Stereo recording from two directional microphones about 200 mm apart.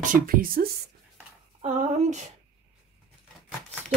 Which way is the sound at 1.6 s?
35° right (ahead or behind).